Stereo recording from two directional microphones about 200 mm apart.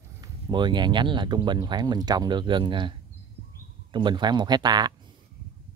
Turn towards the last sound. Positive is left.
turn(degrees=-20)  # may be behind; listen again after turning